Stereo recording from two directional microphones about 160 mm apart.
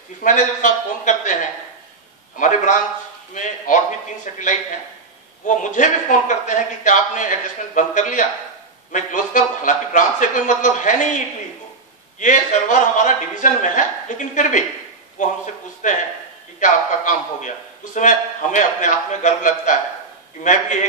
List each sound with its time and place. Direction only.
0.2 s a man's voice: 50° left (ahead or behind)
12.2 s a man's voice: 50° left (ahead or behind)